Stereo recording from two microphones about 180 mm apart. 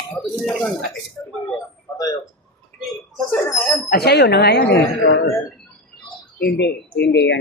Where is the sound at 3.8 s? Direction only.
60° left (ahead or behind).